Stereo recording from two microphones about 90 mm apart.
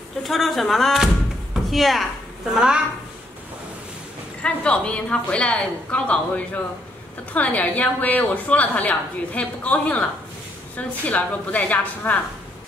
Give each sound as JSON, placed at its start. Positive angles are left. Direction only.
{"t": 0.2, "sound": "a woman's voice", "side_deg": 0}
{"t": 4.4, "sound": "a woman's voice", "side_deg": 10}